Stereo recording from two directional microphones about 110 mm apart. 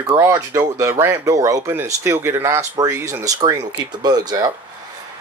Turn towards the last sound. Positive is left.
turn(degrees=-35)  # may be behind; listen again after turning